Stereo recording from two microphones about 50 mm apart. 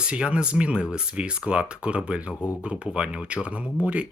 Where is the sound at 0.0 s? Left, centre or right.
Right.